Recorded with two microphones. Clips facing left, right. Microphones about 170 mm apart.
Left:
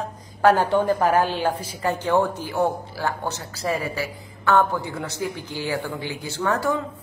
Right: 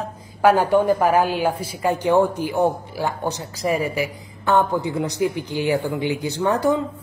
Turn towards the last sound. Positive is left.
turn(degrees=-20)  # may be behind; listen again after turning